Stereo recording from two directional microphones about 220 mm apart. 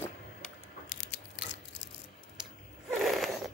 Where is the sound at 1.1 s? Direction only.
55° left (ahead or behind).